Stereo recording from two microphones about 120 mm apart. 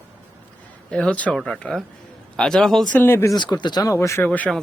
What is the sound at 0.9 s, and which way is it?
Speech, 10° left (ahead or behind).